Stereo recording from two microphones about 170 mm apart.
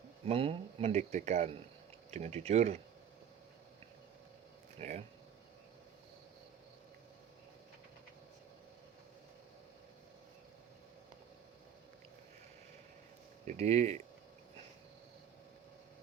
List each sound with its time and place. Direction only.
0.3 s speech: 35° right (ahead or behind)
4.8 s speech: 40° right (ahead or behind)
13.5 s speech: 40° right (ahead or behind)